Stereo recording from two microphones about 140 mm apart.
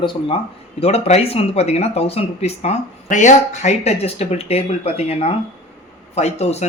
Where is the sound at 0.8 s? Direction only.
45° left (ahead or behind).